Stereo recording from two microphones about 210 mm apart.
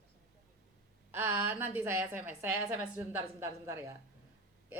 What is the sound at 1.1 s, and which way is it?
A woman's voice, 10° right (ahead or behind).